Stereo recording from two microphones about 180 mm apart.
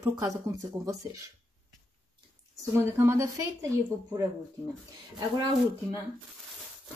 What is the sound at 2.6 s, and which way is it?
A woman's voice, 15° right (ahead or behind).